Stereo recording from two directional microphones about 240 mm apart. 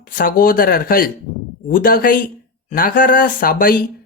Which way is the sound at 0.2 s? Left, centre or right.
Left.